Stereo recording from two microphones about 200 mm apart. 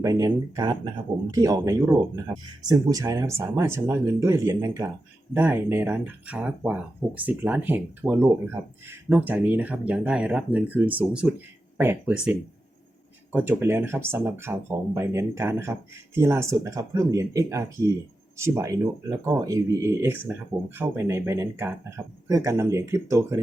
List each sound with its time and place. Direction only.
0.0 s speech: 15° right (ahead or behind)